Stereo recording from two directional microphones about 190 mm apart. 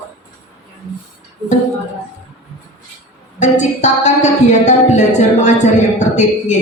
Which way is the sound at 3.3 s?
40° left (ahead or behind).